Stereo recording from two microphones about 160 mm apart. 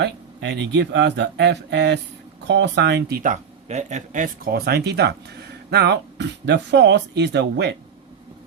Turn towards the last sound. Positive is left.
turn(degrees=-90)